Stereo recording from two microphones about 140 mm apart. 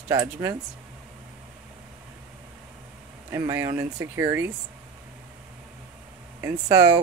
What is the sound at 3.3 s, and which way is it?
Speech, 20° right (ahead or behind).